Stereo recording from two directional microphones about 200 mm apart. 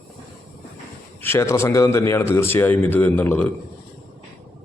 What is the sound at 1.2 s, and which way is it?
A man's voice, 15° left (ahead or behind).